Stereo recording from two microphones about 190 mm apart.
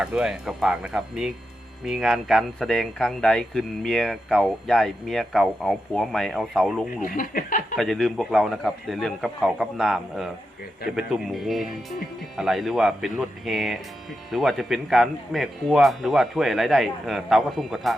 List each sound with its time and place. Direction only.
0.0 s speech: 5° right (ahead or behind)
7.0 s speech: 45° left (ahead or behind)
7.8 s speech: centre (ahead or behind)